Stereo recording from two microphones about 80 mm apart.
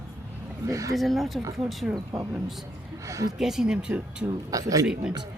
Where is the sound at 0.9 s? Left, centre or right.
Centre.